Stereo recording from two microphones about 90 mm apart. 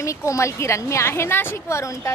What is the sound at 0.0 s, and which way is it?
A woman's voice, 35° left (ahead or behind).